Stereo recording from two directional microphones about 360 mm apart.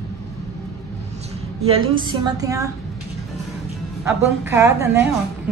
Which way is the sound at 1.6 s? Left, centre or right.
Centre.